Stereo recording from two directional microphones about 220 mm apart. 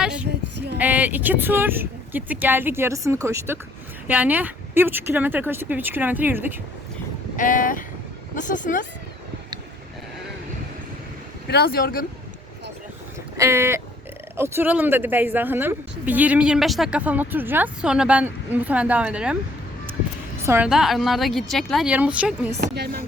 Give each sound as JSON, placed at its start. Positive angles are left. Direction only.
{"t": 0.0, "sound": "female singing", "side_deg": -5}
{"t": 0.8, "sound": "speech", "side_deg": -5}
{"t": 7.3, "sound": "speech", "side_deg": 40}
{"t": 11.4, "sound": "speech", "side_deg": 45}
{"t": 13.3, "sound": "speech", "side_deg": -15}
{"t": 20.4, "sound": "a woman's voice", "side_deg": -10}
{"t": 20.7, "sound": "speech", "side_deg": 0}
{"t": 22.6, "sound": "speech", "side_deg": -45}